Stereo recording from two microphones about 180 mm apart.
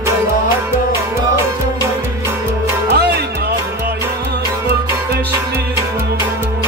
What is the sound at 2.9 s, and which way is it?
Music, 65° right (ahead or behind).